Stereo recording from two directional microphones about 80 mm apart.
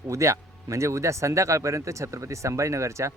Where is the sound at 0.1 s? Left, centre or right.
Right.